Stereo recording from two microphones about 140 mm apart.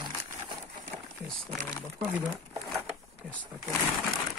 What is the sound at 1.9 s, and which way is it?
Speech, 10° right (ahead or behind).